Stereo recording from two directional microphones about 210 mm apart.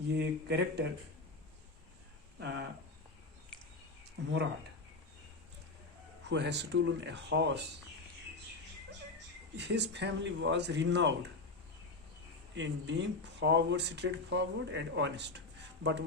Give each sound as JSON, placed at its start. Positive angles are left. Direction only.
{"t": 0.2, "sound": "speech", "side_deg": -55}
{"t": 2.4, "sound": "speech", "side_deg": -55}
{"t": 6.2, "sound": "speech", "side_deg": -55}
{"t": 9.6, "sound": "speech", "side_deg": -55}
{"t": 12.5, "sound": "speech", "side_deg": -60}